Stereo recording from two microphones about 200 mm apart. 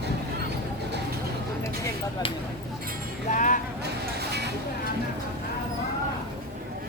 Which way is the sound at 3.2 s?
40° left (ahead or behind).